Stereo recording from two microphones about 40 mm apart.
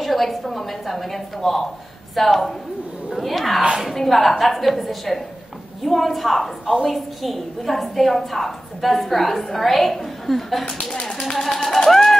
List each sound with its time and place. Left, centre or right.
0.0 s a woman's voice: centre